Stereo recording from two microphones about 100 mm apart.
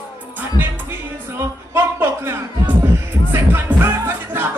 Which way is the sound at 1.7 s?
25° right (ahead or behind).